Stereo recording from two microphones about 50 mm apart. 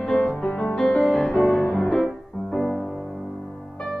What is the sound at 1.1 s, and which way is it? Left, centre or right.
Music, centre.